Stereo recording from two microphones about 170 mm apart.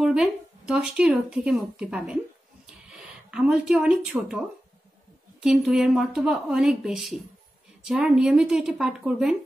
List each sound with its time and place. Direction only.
0.0 s speech: 5° right (ahead or behind)